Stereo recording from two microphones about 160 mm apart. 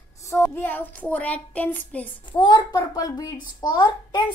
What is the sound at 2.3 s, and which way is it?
A child's voice, 30° left (ahead or behind).